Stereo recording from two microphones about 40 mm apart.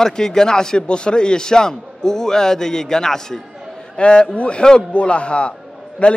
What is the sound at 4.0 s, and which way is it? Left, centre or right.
A man's voice, left.